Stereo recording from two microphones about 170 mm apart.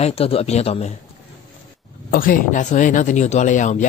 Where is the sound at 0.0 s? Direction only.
35° left (ahead or behind).